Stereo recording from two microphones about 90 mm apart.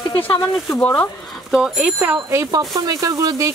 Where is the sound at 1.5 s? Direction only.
5° right (ahead or behind).